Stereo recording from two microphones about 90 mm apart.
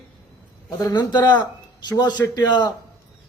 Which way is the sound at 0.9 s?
50° left (ahead or behind).